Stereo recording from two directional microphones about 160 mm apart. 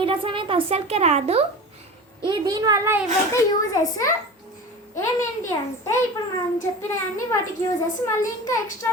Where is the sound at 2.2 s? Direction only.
25° right (ahead or behind).